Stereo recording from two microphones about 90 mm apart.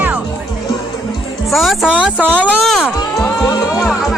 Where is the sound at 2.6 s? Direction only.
Centre (ahead or behind).